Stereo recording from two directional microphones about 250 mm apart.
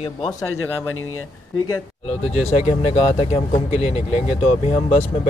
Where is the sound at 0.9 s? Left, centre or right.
Left.